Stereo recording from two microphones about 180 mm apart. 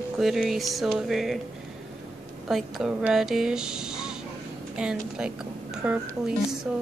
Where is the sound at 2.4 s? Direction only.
Centre (ahead or behind).